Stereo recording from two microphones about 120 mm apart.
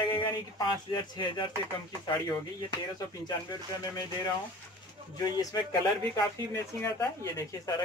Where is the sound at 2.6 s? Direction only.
35° left (ahead or behind).